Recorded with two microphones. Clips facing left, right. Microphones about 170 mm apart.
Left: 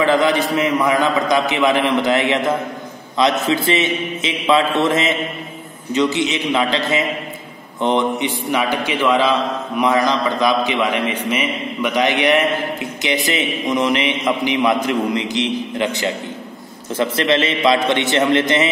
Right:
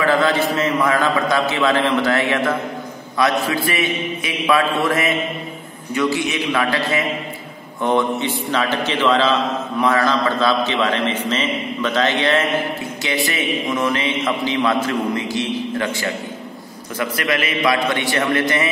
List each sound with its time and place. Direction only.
0.0 s a man's voice: 15° left (ahead or behind)